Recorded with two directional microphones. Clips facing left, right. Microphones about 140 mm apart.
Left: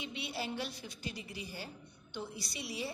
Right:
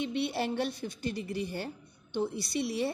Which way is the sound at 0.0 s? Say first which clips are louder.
Right 9 dB; 55° right (ahead or behind).